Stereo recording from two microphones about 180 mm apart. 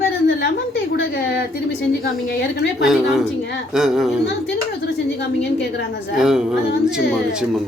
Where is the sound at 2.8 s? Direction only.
Centre (ahead or behind).